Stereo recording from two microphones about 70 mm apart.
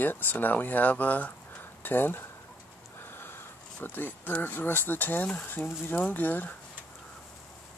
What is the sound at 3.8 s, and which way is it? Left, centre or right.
Speech, left.